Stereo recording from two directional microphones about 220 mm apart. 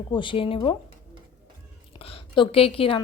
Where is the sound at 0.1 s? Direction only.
20° left (ahead or behind).